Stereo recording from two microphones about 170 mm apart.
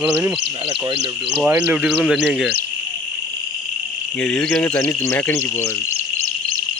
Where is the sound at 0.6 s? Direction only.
30° right (ahead or behind).